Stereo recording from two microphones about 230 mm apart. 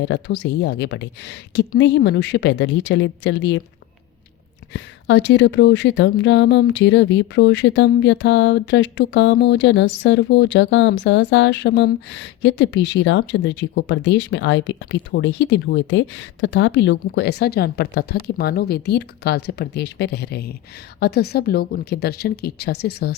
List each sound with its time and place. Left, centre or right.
0.0 s speech: left
4.7 s speech: left